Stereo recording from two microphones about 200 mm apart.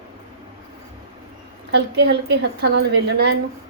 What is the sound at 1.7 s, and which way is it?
A woman's voice, 55° right (ahead or behind).